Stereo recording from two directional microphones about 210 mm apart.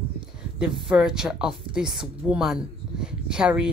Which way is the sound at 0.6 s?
5° right (ahead or behind).